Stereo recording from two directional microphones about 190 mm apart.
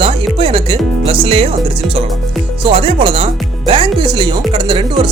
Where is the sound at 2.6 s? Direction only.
25° right (ahead or behind).